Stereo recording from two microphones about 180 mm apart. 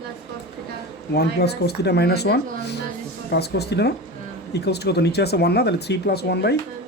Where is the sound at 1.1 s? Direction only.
65° left (ahead or behind).